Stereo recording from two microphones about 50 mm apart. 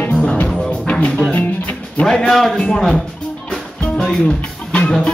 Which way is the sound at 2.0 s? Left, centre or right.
Centre.